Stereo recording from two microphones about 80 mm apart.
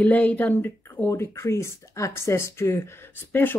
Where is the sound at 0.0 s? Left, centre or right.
Centre.